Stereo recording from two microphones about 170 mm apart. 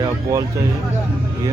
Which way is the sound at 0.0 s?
20° right (ahead or behind).